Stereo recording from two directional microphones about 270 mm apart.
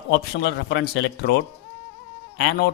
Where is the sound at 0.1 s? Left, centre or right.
Left.